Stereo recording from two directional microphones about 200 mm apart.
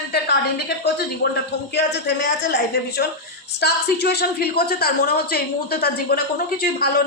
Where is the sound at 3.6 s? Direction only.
55° left (ahead or behind).